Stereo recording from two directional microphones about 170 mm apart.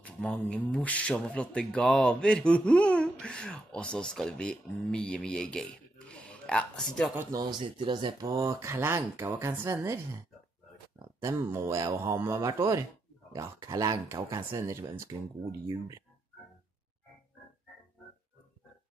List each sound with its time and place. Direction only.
0.0 s speech: 5° left (ahead or behind)
7.2 s speech: 20° right (ahead or behind)
11.1 s speech: 15° right (ahead or behind)